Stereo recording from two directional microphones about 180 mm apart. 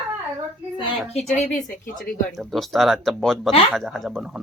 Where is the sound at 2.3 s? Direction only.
Centre (ahead or behind).